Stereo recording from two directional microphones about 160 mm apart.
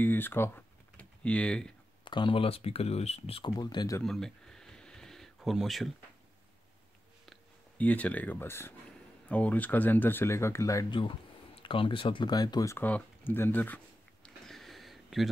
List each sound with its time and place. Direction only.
0.0 s speech: 10° left (ahead or behind)
2.0 s speech: 30° left (ahead or behind)
3.5 s speech: 25° left (ahead or behind)
4.0 s a sound: 5° left (ahead or behind)
7.2 s speech: 10° left (ahead or behind)
11.6 s speech: 35° left (ahead or behind); by 13.7 s 10° left (ahead or behind)
14.2 s a sound: centre (ahead or behind)